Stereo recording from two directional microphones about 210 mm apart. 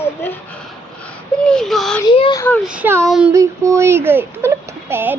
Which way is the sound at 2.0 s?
25° left (ahead or behind).